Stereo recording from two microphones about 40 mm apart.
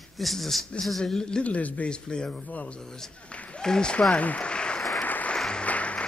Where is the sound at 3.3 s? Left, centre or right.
Left.